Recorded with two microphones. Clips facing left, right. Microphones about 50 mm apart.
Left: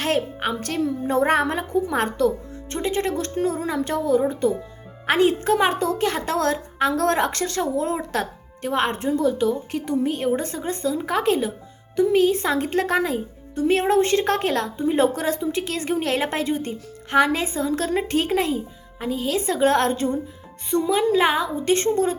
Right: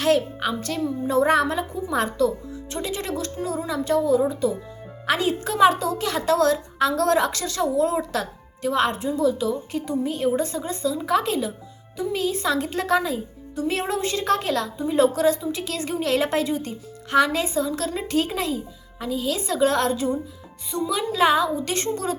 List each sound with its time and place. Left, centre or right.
0.0 s music: left
0.6 s speech: left
2.7 s a woman's voice: left
9.0 s a woman's voice: left
20.8 s speech: left